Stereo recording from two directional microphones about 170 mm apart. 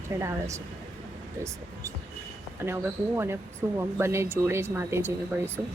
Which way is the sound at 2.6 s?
15° right (ahead or behind).